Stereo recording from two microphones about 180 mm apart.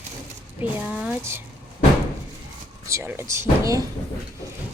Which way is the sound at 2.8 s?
15° right (ahead or behind).